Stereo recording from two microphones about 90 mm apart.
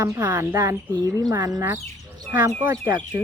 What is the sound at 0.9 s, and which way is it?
Speech, 50° right (ahead or behind).